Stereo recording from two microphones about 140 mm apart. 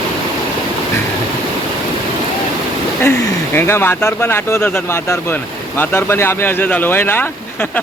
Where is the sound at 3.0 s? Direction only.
15° left (ahead or behind).